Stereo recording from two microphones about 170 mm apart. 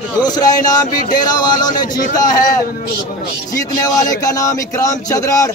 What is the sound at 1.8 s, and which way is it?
Speech, 50° left (ahead or behind).